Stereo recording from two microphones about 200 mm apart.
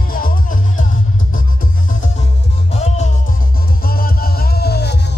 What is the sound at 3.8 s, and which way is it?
Music, 45° left (ahead or behind).